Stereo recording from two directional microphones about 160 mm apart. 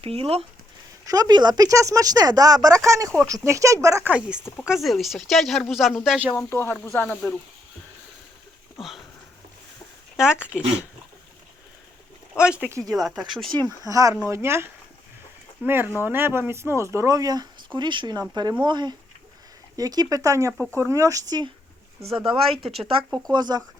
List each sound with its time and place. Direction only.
0.0 s speech: 40° right (ahead or behind)
1.0 s speech: 25° right (ahead or behind)
4.6 s speech: centre (ahead or behind)
6.3 s speech: 15° left (ahead or behind)
10.5 s speech: 5° right (ahead or behind)
12.4 s speech: 5° right (ahead or behind)
13.8 s speech: 20° right (ahead or behind)
22.9 s speech: 35° right (ahead or behind)